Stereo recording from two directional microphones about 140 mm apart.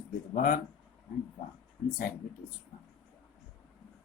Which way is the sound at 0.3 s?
70° left (ahead or behind).